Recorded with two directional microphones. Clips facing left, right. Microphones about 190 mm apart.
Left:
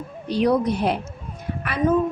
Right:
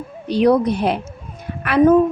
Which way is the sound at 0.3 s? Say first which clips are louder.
Right 5 dB; 75° right (ahead or behind).